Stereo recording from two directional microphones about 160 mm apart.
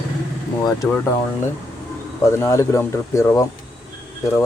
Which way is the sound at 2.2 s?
20° left (ahead or behind).